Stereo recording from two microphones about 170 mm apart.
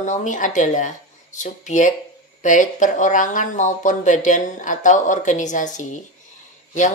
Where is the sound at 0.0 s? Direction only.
45° left (ahead or behind).